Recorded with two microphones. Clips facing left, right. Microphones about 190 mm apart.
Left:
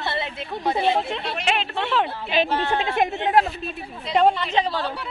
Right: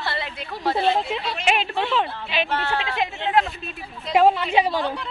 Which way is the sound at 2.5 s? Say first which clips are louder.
Left 2 dB; 15° left (ahead or behind).